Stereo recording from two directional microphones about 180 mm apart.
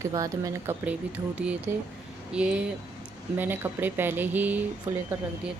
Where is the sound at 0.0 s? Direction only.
20° right (ahead or behind).